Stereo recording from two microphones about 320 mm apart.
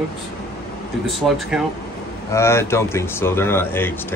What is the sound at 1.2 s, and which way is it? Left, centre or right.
A man's voice, centre.